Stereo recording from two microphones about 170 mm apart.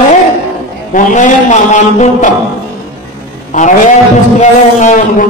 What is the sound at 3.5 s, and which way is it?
Music, 45° left (ahead or behind).